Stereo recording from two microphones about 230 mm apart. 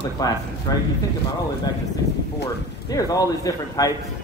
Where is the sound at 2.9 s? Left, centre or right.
Centre.